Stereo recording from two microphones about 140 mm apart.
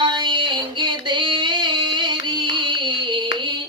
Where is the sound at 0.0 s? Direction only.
35° right (ahead or behind).